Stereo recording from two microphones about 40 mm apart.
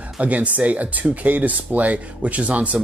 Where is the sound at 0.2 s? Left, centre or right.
Right.